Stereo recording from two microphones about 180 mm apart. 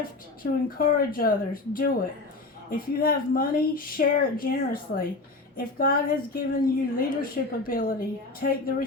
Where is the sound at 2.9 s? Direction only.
55° left (ahead or behind).